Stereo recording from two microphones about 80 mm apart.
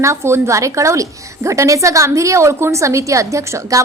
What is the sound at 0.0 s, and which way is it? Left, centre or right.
A woman's voice, right.